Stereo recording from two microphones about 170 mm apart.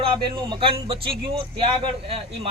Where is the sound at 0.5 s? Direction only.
30° right (ahead or behind).